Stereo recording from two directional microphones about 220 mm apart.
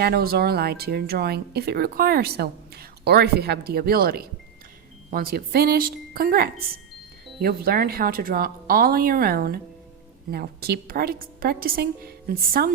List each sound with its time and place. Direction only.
0.0 s speech: 45° right (ahead or behind)